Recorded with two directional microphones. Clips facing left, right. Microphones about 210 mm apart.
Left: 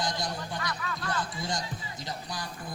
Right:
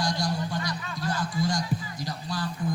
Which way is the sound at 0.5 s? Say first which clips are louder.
Right 3 dB; 25° right (ahead or behind).